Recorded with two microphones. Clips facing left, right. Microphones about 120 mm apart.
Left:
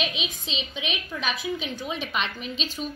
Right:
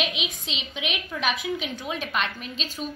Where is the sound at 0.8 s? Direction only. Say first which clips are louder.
Right 4 dB; 65° right (ahead or behind).